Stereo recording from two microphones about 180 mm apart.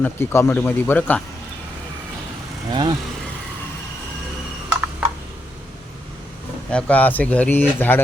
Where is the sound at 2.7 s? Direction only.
25° right (ahead or behind).